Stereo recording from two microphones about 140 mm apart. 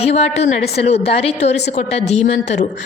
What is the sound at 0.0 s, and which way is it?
A woman's voice, 50° left (ahead or behind).